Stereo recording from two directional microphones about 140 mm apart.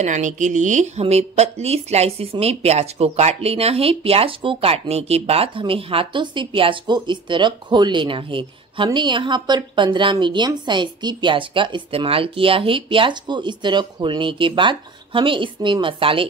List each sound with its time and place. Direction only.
0.0 s speech: 60° right (ahead or behind); by 16.3 s 40° right (ahead or behind)